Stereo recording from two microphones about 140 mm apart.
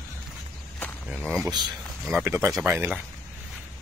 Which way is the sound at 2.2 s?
20° right (ahead or behind).